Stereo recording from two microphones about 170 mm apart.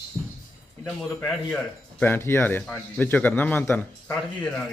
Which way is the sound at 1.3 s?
5° left (ahead or behind).